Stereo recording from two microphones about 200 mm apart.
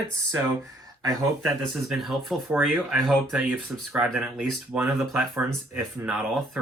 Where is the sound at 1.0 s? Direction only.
20° right (ahead or behind).